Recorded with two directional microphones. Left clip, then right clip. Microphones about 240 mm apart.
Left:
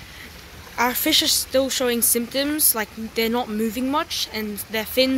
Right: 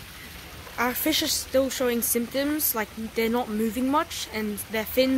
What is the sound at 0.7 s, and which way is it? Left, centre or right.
Speech, centre.